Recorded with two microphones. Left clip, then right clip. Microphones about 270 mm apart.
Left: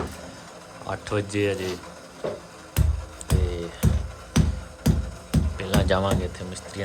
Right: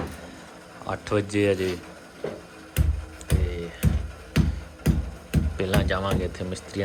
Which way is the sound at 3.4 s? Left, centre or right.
Centre.